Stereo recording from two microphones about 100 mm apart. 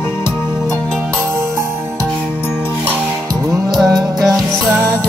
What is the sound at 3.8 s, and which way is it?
Music, 35° right (ahead or behind).